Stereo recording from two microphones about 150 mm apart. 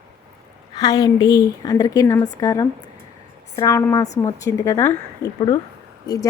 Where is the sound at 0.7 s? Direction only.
25° left (ahead or behind).